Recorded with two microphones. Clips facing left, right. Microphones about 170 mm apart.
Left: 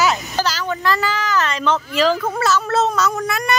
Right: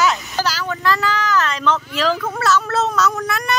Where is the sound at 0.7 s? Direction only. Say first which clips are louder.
Right 1 dB; 5° left (ahead or behind).